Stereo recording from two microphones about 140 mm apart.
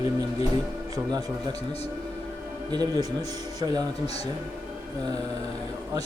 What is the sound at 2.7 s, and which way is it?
Speech, 30° right (ahead or behind).